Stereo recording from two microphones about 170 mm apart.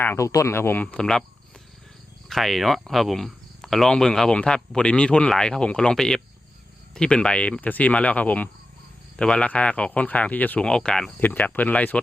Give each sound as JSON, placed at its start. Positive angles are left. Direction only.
{"t": 0.0, "sound": "speech", "side_deg": 15}
{"t": 2.3, "sound": "speech", "side_deg": 0}